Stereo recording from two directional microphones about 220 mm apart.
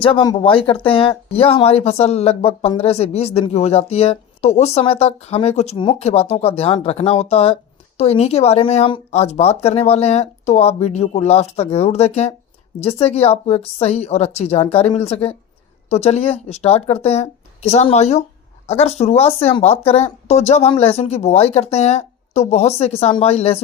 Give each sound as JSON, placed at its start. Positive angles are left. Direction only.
{"t": 0.0, "sound": "speech", "side_deg": 25}